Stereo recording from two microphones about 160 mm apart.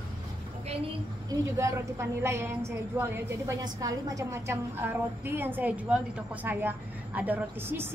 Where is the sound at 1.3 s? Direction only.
20° right (ahead or behind).